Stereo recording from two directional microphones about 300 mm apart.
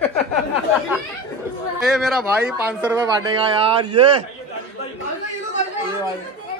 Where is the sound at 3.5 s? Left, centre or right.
Centre.